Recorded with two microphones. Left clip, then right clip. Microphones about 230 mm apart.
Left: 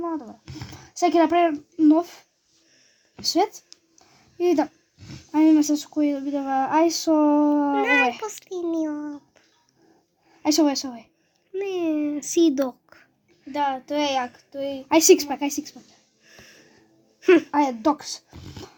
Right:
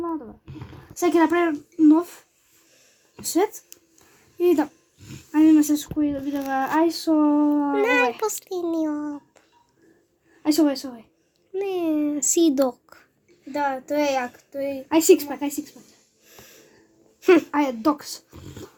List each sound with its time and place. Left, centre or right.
0.0 s a sound: left
4.4 s speech: left
6.0 s a child's voice: left
7.8 s a child's voice: centre
10.4 s a child's voice: left
11.5 s a child's voice: centre
13.5 s a child's voice: left
16.2 s a sound: centre
17.8 s speech: left